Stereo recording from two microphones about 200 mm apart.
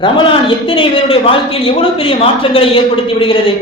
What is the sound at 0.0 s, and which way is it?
A woman's voice, 25° left (ahead or behind).